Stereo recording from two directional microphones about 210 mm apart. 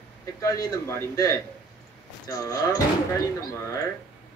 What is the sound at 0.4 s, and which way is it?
Child singing, 15° left (ahead or behind).